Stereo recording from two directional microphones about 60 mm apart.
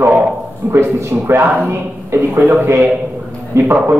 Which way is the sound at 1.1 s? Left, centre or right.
Right.